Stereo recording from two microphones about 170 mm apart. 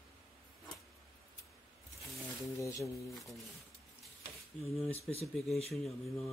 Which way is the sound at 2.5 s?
20° left (ahead or behind).